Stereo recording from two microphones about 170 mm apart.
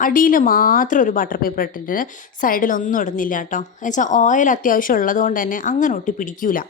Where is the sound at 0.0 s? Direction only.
55° left (ahead or behind).